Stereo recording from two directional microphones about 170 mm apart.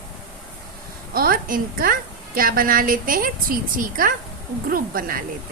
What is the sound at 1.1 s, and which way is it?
A woman's voice, 60° right (ahead or behind).